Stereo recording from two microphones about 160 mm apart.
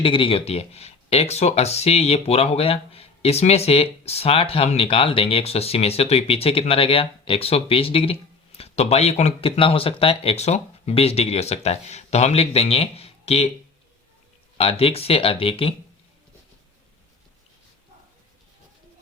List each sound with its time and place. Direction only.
0.0 s speech: 35° left (ahead or behind)
14.6 s speech: 35° left (ahead or behind)